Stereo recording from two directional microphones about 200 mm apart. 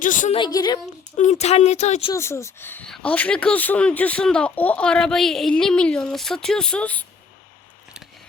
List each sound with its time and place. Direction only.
0.0 s speech: 40° left (ahead or behind)
0.3 s a woman's voice: 20° left (ahead or behind)
1.1 s speech: 35° left (ahead or behind)
2.1 s speech: 15° left (ahead or behind)